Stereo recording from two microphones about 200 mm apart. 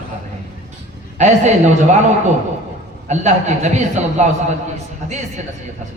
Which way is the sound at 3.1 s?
35° right (ahead or behind).